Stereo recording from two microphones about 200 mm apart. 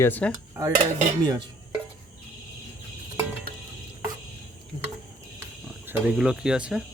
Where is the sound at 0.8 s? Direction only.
20° right (ahead or behind).